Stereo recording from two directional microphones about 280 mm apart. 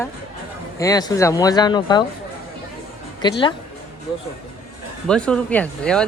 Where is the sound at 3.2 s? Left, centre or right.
Centre.